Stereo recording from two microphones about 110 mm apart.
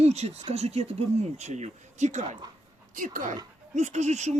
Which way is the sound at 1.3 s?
90° right.